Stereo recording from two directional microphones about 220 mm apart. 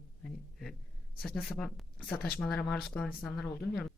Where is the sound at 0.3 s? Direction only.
Centre (ahead or behind).